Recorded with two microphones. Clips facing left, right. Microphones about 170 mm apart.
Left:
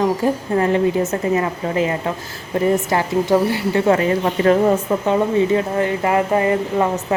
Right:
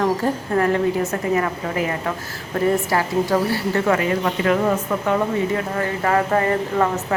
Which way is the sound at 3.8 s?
30° left (ahead or behind).